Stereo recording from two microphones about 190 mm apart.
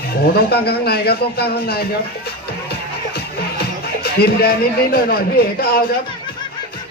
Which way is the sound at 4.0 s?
55° left (ahead or behind).